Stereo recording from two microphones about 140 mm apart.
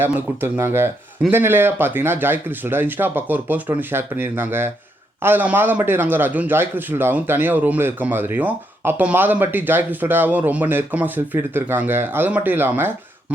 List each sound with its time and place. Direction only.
0.0 s a man's voice: 15° right (ahead or behind)